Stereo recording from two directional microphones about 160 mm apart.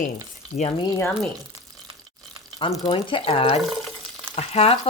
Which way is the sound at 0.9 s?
10° left (ahead or behind).